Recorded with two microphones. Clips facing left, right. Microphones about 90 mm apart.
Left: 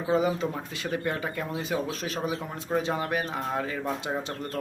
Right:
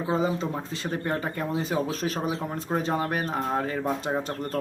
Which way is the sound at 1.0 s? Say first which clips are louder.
Right 2 dB; 35° right (ahead or behind).